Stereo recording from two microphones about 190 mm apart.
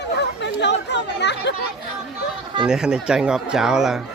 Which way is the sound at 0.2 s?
65° left (ahead or behind).